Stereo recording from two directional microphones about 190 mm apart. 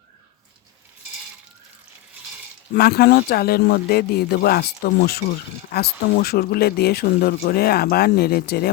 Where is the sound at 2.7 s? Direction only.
55° left (ahead or behind).